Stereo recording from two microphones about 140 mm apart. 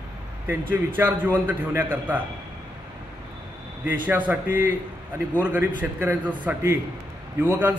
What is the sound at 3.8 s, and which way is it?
A man's voice, 10° right (ahead or behind).